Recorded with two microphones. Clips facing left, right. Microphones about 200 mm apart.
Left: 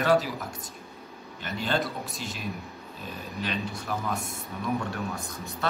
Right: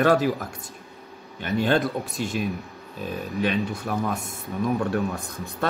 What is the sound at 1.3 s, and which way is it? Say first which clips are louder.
Speech: right 7 dB; 55° right (ahead or behind).